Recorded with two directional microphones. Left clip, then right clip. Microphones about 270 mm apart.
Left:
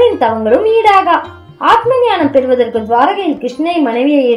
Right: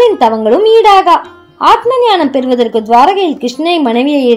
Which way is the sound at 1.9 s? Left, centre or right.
Right.